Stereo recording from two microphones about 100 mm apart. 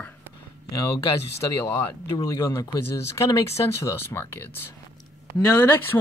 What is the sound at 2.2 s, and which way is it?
Speech, 35° left (ahead or behind).